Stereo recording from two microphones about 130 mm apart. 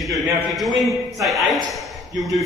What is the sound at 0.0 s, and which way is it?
A man's voice, centre (ahead or behind).